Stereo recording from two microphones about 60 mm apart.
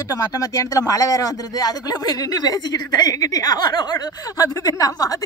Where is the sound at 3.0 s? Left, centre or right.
Left.